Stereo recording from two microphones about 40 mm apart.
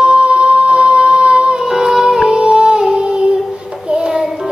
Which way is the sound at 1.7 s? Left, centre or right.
Centre.